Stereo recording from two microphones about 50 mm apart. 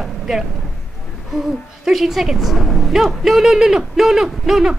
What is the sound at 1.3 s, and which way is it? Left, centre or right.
Speech, centre.